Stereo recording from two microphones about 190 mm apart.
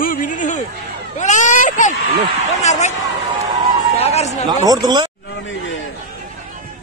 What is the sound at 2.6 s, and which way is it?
Speech, 35° left (ahead or behind).